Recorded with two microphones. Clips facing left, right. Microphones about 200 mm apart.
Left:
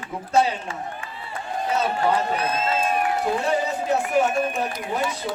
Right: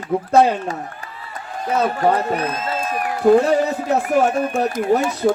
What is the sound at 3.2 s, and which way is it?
Speech, 45° right (ahead or behind).